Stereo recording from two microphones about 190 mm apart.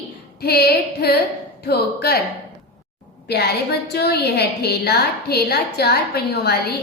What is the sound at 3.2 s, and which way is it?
A woman's voice, 60° left (ahead or behind).